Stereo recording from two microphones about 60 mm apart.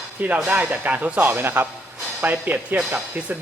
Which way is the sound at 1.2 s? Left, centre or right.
Right.